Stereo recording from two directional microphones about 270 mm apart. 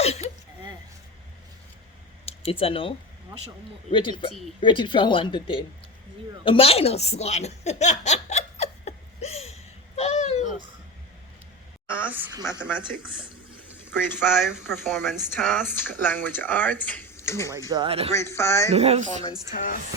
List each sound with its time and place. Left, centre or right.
0.0 s speech: left
2.2 s speech: left
3.9 s speech: centre
6.4 s chuckle: centre
11.9 s a woman's voice: centre
13.7 s a sound: centre
14.3 s speech: centre
17.7 s speech: centre
18.1 s speech: centre
18.7 s speech: right